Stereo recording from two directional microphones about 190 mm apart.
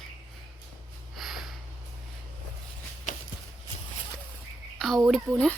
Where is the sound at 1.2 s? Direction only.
Centre (ahead or behind).